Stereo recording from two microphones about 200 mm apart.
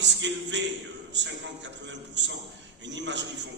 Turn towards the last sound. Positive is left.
turn(degrees=-65)  # may be behind; listen again after turning